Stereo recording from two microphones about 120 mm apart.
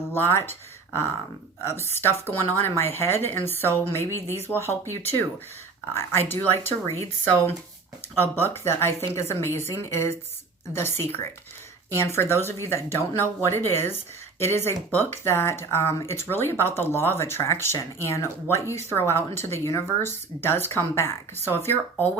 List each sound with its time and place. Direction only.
0.1 s speech: 20° left (ahead or behind)
1.9 s speech: 20° left (ahead or behind)